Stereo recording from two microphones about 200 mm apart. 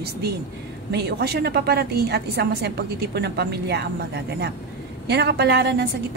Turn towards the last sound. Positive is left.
turn(degrees=-55)  # may be behind; listen again after turning